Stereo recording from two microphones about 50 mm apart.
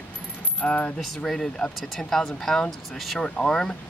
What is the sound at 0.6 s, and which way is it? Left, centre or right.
Coin, left.